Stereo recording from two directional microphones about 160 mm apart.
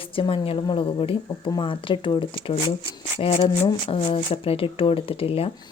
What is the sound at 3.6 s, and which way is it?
Speech, 30° left (ahead or behind).